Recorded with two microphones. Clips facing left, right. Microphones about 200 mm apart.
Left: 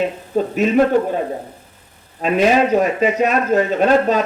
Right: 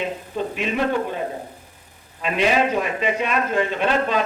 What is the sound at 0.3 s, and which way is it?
Speech, 40° left (ahead or behind).